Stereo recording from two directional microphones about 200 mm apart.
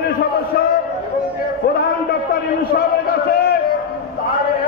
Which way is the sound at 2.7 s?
50° left (ahead or behind).